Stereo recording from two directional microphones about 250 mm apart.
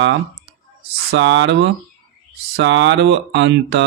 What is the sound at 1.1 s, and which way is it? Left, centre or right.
Speech, right.